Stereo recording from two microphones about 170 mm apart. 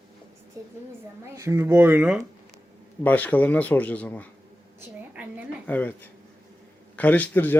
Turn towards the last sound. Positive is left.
turn(degrees=10)  # may be behind; listen again after turning